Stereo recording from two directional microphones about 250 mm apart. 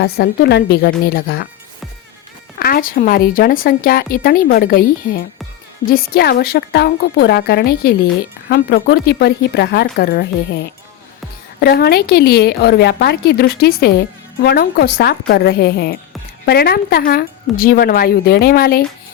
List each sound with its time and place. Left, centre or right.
0.0 s a woman's voice: left
2.6 s a woman's voice: left